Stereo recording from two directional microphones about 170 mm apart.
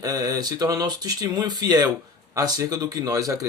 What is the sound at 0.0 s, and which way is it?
Speech, 20° right (ahead or behind).